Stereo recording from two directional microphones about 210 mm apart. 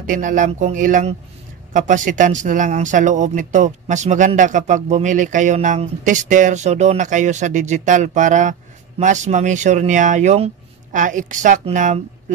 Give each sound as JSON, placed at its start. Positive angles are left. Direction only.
{"t": 0.0, "sound": "speech", "side_deg": -40}